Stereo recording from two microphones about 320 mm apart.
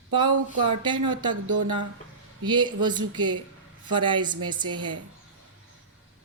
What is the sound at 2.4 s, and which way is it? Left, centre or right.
Speech, centre.